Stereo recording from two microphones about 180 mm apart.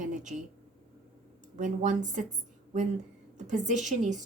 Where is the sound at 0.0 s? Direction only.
45° right (ahead or behind).